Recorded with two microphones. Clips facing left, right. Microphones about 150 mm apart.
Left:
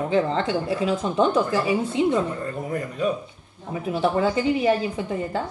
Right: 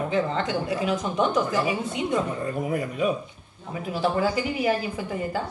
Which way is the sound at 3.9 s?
25° left (ahead or behind).